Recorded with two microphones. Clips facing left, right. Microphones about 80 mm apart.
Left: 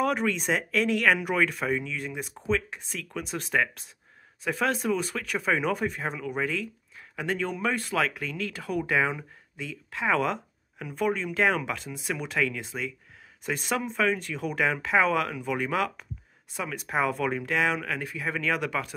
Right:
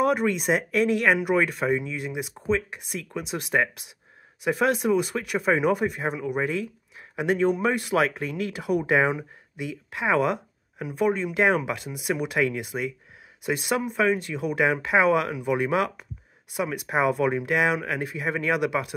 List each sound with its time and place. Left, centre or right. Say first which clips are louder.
0.0 s speech: right 4 dB; centre